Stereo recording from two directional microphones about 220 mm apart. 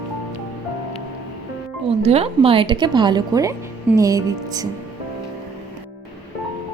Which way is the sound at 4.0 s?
15° right (ahead or behind).